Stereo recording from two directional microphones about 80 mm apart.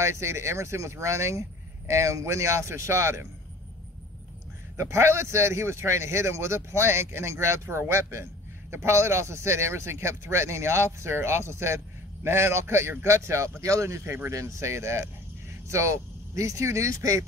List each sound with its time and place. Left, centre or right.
0.0 s a man's voice: right
4.7 s a man's voice: right